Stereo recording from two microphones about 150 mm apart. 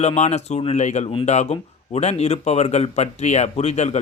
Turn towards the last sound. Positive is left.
turn(degrees=50)  # may be behind; listen again after turning